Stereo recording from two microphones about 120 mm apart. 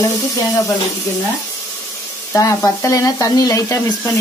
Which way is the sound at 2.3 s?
25° left (ahead or behind).